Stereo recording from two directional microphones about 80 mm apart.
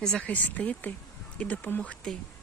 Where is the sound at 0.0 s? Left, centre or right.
Centre.